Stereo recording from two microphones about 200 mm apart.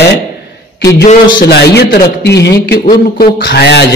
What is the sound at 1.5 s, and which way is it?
A man's voice, 55° left (ahead or behind).